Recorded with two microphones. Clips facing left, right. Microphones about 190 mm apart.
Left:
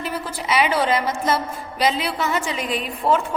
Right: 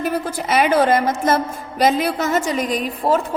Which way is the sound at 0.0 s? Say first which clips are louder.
Right 6 dB; 50° right (ahead or behind).